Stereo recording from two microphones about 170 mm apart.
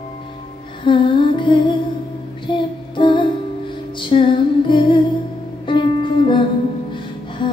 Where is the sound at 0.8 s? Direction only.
30° left (ahead or behind).